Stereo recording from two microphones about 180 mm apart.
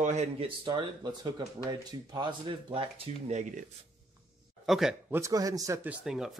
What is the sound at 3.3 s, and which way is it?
Speech, 40° right (ahead or behind).